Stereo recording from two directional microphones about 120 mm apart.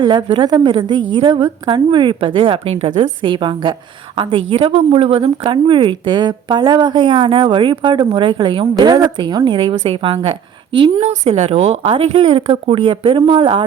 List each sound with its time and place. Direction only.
0.0 s a woman's voice: 45° right (ahead or behind)
11.0 s speech: 55° right (ahead or behind)